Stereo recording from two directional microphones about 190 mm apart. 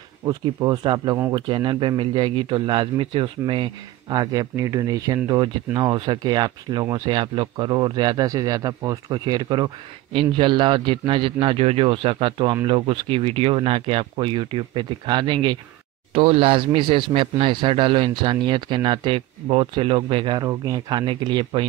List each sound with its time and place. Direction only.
0.2 s speech: 20° right (ahead or behind)